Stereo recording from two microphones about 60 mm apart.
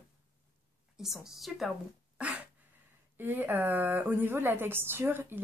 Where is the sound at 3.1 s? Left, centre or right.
Right.